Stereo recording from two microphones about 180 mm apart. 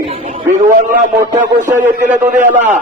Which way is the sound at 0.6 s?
50° right (ahead or behind).